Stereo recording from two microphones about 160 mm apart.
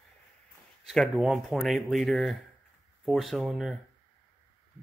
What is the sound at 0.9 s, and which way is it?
Speech, centre (ahead or behind).